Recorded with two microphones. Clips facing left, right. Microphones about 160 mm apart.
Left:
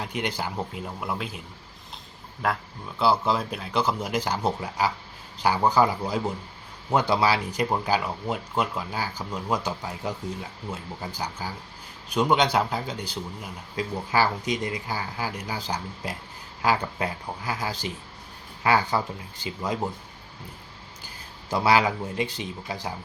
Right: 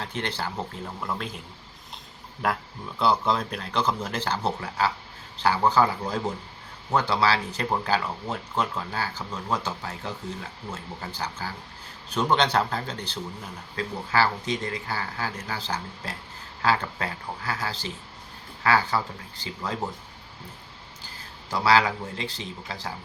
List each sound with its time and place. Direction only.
0.0 s speech: 10° left (ahead or behind)
3.0 s speech: 5° left (ahead or behind)
21.5 s speech: 20° left (ahead or behind)